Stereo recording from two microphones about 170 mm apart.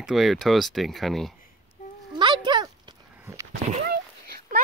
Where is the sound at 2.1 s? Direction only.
25° right (ahead or behind).